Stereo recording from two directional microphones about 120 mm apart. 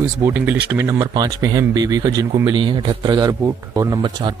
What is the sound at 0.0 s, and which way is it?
Speech, 20° right (ahead or behind).